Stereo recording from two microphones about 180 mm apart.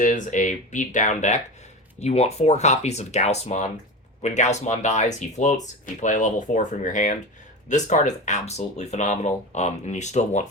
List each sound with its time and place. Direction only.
0.0 s speech: 45° left (ahead or behind)